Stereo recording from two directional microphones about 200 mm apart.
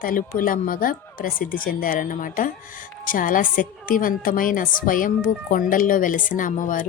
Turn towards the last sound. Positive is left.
turn(degrees=40)  # may be behind; listen again after turning